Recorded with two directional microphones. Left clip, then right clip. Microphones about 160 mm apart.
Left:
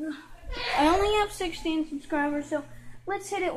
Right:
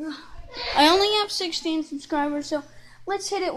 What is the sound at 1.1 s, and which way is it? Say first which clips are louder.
Speech: right 3 dB; 45° right (ahead or behind).